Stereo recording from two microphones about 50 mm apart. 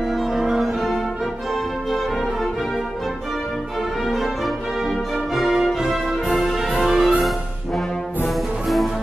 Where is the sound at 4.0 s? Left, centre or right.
Centre.